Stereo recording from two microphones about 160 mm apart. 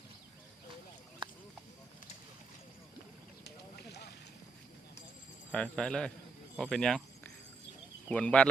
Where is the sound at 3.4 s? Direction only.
90° left.